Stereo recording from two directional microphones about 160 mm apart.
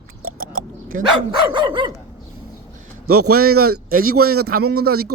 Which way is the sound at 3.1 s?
75° right (ahead or behind).